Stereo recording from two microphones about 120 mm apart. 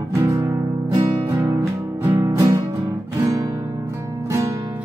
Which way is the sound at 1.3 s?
25° right (ahead or behind).